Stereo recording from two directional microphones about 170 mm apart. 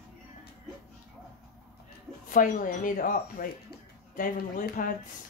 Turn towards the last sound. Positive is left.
turn(degrees=55)  # may be behind; listen again after turning